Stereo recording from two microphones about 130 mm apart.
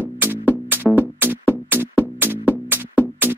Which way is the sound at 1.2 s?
15° right (ahead or behind).